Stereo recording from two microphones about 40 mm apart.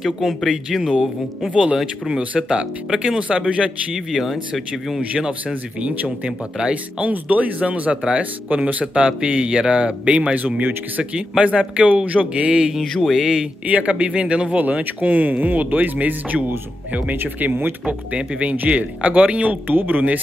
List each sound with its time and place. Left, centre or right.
0.0 s speech: centre
1.5 s speech: right
3.2 s speech: right
3.9 s speech: centre
6.2 s speech: right
9.0 s speech: right
11.1 s speech: right
13.0 s speech: centre
13.7 s speech: right
14.6 s speech: right
17.4 s speech: right
17.8 s speech: right